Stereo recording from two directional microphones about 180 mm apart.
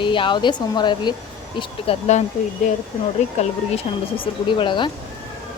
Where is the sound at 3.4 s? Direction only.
35° left (ahead or behind).